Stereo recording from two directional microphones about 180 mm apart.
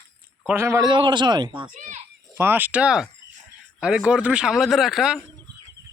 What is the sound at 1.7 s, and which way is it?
Speech, 45° right (ahead or behind).